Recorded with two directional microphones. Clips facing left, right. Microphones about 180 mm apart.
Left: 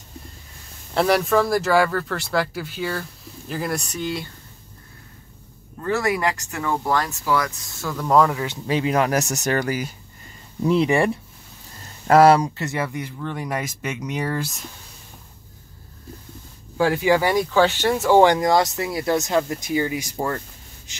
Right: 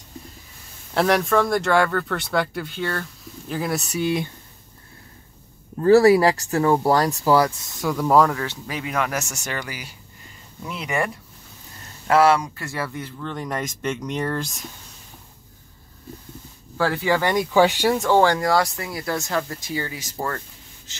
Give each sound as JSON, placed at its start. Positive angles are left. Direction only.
{"t": 0.9, "sound": "speech", "side_deg": 0}
{"t": 5.8, "sound": "speech", "side_deg": -35}
{"t": 7.8, "sound": "speech", "side_deg": -10}
{"t": 8.6, "sound": "speech", "side_deg": 30}
{"t": 10.7, "sound": "speech", "side_deg": 30}
{"t": 12.1, "sound": "speech", "side_deg": 40}
{"t": 12.4, "sound": "speech", "side_deg": 20}
{"t": 16.7, "sound": "speech", "side_deg": 15}
{"t": 17.5, "sound": "speech", "side_deg": -15}
{"t": 18.1, "sound": "speech", "side_deg": 20}